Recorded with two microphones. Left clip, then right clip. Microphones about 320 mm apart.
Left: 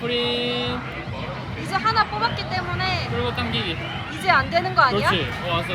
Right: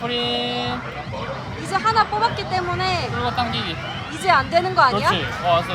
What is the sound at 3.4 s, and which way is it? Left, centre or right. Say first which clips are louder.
Speech: right 3 dB; right.